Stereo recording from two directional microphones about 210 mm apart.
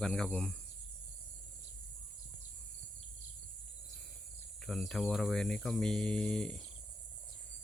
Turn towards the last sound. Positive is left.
turn(degrees=5)  # may be behind; listen again after turning